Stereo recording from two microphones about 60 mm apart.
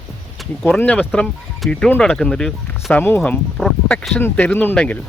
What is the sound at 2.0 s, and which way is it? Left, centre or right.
Speech, centre.